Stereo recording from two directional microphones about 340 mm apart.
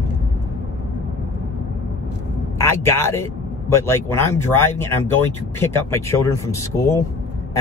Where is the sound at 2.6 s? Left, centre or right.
Centre.